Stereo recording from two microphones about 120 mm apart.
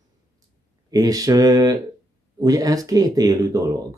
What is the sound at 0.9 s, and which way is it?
Mantra, 30° right (ahead or behind).